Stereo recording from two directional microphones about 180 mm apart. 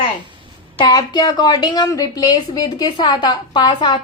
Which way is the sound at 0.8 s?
25° left (ahead or behind).